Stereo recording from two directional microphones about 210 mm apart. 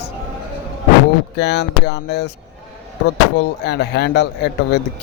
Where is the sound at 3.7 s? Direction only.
50° left (ahead or behind).